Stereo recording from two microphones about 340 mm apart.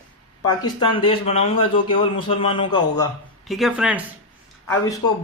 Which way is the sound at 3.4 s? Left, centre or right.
Centre.